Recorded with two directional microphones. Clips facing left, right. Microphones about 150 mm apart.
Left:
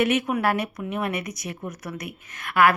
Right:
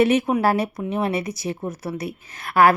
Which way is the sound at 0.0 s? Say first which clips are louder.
Right 4 dB; 30° right (ahead or behind).